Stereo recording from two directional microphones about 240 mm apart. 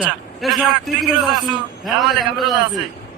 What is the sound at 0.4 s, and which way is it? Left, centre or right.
Speech, centre.